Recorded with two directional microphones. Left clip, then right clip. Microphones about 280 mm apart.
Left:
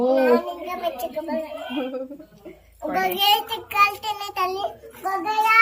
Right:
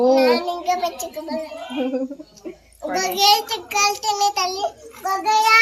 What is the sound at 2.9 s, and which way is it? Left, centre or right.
Child singing, centre.